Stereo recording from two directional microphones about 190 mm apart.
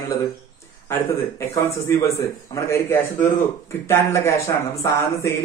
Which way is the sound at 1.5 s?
15° left (ahead or behind).